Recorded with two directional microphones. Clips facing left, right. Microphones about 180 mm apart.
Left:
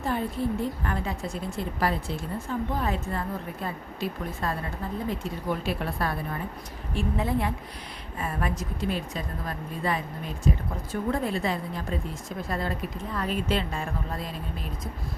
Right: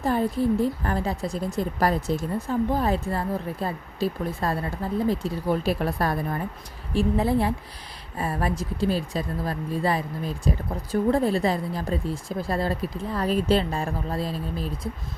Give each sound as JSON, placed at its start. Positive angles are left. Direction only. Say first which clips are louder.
{"t": 0.0, "sound": "a woman's voice", "louder": "right 5 dB", "side_deg": -40}